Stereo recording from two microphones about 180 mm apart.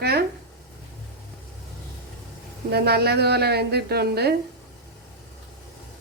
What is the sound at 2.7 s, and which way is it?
A woman's voice, 65° right (ahead or behind).